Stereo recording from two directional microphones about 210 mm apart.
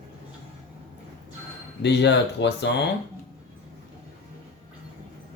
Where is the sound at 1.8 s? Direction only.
55° left (ahead or behind).